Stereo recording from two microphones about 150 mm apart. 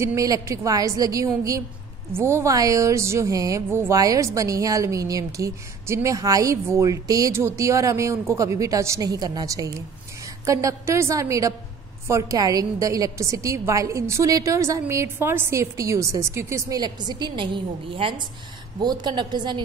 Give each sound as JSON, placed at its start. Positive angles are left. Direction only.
{"t": 0.0, "sound": "a woman's voice", "side_deg": -20}